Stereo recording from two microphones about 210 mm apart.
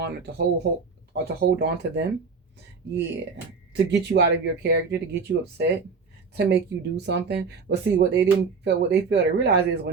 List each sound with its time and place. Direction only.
0.0 s speech: 50° right (ahead or behind)
3.7 s speech: 55° right (ahead or behind)